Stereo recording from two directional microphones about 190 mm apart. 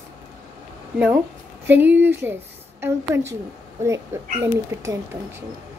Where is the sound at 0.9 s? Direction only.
10° right (ahead or behind).